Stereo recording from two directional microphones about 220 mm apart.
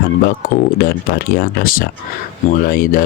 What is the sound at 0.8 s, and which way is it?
Speech, 45° left (ahead or behind).